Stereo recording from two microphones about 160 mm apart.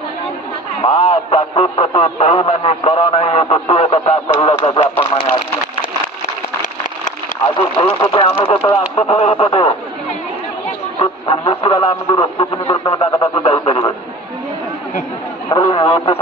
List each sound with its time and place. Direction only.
0.8 s a man's voice: 35° left (ahead or behind)
7.4 s a man's voice: 30° left (ahead or behind)
11.0 s speech: 35° left (ahead or behind)
13.4 s a man's voice: 35° left (ahead or behind)
15.5 s speech: 25° left (ahead or behind)